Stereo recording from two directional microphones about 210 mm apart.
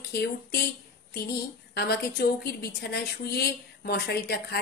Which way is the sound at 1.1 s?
45° left (ahead or behind).